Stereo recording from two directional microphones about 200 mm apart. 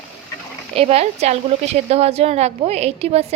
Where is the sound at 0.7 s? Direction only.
30° right (ahead or behind).